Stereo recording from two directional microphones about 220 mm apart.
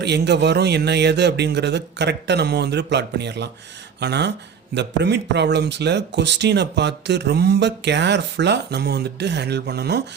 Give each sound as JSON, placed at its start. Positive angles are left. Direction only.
{"t": 0.0, "sound": "speech", "side_deg": -50}